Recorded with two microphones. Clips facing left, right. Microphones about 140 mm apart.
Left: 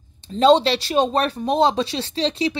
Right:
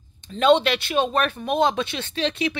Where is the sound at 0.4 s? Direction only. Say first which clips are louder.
Left 3 dB; 35° left (ahead or behind).